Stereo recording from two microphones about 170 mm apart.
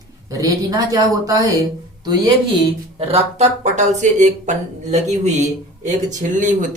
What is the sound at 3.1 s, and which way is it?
Speech, 40° right (ahead or behind).